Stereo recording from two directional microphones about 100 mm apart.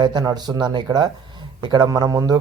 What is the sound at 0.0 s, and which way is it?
A man's voice, 45° right (ahead or behind).